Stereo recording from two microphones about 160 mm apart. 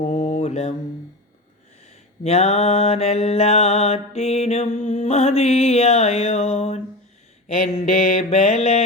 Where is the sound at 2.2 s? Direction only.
40° left (ahead or behind).